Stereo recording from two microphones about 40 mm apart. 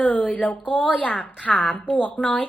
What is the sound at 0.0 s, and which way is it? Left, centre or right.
A woman's voice, left.